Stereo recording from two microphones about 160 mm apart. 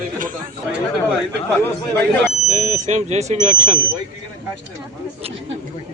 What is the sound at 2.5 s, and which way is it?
Speech, 50° right (ahead or behind).